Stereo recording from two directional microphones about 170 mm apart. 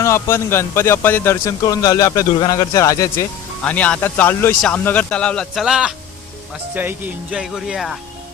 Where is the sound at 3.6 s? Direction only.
10° left (ahead or behind).